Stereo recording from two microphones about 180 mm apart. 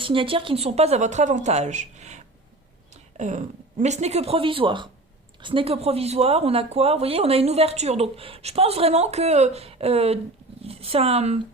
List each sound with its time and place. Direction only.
0.0 s speech: 30° right (ahead or behind)